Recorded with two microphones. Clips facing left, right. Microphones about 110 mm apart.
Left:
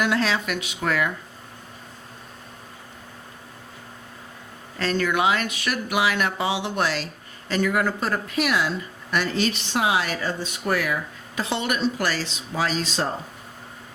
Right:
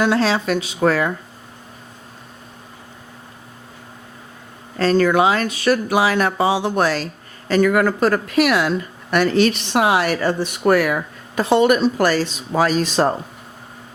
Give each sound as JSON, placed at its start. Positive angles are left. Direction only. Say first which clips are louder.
{"t": 0.0, "sound": "speech", "louder": "right 6 dB", "side_deg": -30}
{"t": 4.8, "sound": "speech", "louder": "right 8 dB", "side_deg": -35}